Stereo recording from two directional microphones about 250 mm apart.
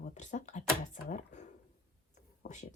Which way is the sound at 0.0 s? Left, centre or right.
Left.